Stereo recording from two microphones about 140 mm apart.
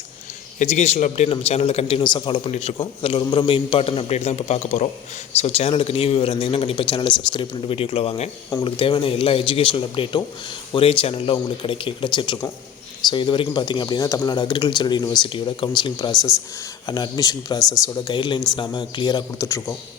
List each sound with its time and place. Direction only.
0.6 s speech: 55° left (ahead or behind)
2.0 s speech: 35° left (ahead or behind)